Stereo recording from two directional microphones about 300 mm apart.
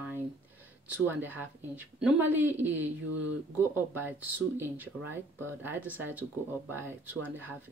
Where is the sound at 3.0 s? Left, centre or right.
Right.